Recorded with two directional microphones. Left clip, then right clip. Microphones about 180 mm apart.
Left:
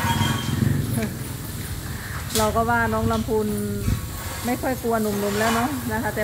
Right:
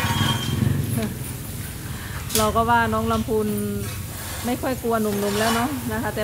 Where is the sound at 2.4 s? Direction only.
15° right (ahead or behind).